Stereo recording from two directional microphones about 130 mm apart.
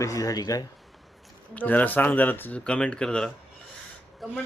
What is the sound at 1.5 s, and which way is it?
Speech, 15° left (ahead or behind).